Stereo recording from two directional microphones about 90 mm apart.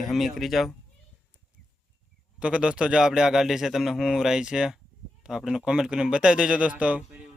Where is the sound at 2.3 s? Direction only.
10° right (ahead or behind).